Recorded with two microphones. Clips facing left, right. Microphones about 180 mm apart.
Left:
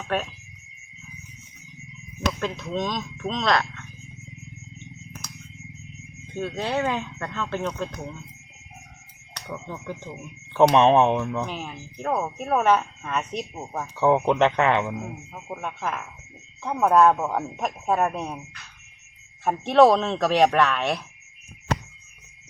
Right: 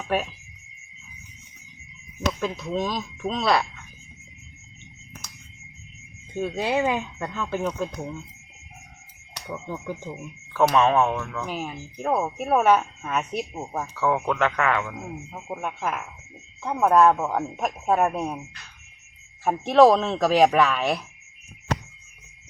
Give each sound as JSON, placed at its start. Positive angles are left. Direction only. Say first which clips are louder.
{"t": 0.1, "sound": "speech", "louder": "right 1 dB", "side_deg": -10}
{"t": 2.4, "sound": "speech", "louder": "right 1 dB", "side_deg": -5}
{"t": 6.3, "sound": "speech", "louder": "right 2 dB", "side_deg": -10}
{"t": 9.3, "sound": "speech", "louder": "right 2 dB", "side_deg": -10}
{"t": 10.5, "sound": "speech", "louder": "left 3 dB", "side_deg": 25}
{"t": 11.4, "sound": "speech", "louder": "right 2 dB", "side_deg": -5}
{"t": 13.9, "sound": "speech", "louder": "left 5 dB", "side_deg": 25}
{"t": 15.4, "sound": "speech", "louder": "right 1 dB", "side_deg": -10}
{"t": 19.5, "sound": "speech", "louder": "right 1 dB", "side_deg": 0}